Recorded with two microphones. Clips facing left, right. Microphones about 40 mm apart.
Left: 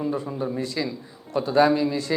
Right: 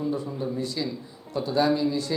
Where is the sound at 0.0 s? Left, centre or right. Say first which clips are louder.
Left 2 dB; left.